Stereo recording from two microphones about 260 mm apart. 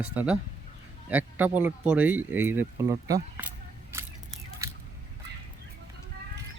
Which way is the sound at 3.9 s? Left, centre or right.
Centre.